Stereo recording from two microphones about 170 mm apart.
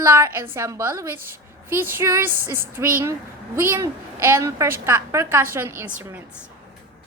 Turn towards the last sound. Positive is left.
turn(degrees=-10)  # may be behind; listen again after turning